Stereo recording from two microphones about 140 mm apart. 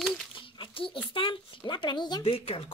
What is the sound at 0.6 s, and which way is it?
Speech, 40° left (ahead or behind).